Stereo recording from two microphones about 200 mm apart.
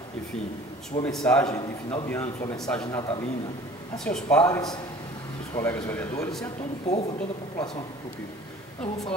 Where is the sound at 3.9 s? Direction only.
5° left (ahead or behind).